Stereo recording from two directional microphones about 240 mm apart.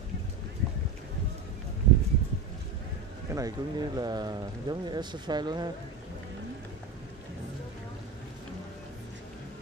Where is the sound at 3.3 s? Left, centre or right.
Centre.